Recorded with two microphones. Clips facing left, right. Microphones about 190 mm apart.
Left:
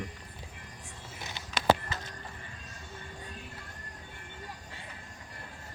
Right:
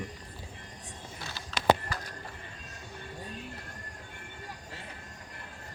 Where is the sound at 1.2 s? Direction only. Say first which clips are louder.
Right 1 dB; 20° left (ahead or behind).